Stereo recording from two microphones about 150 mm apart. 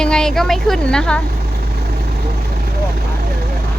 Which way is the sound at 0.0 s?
5° left (ahead or behind).